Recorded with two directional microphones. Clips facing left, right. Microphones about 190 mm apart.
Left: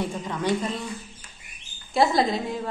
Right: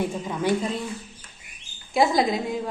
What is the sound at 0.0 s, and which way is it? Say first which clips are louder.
Speech: right 2 dB; 10° right (ahead or behind).